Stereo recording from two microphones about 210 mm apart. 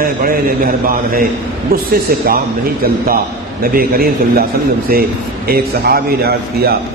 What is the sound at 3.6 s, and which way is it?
Speech, 45° right (ahead or behind).